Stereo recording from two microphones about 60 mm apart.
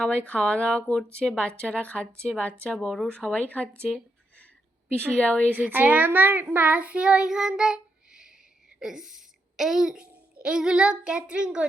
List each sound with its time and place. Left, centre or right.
0.0 s speech: left
0.9 s speech: centre; by 2.7 s left
2.7 s speech: centre
5.2 s speech: left
5.5 s a child's voice: right
6.6 s child singing: right
8.8 s a child's voice: centre